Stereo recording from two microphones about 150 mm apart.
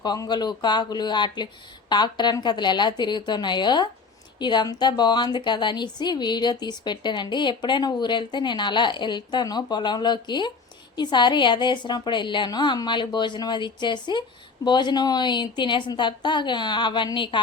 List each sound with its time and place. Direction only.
0.0 s a woman's voice: 25° left (ahead or behind)